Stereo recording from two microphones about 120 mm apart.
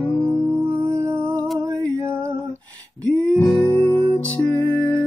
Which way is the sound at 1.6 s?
25° right (ahead or behind).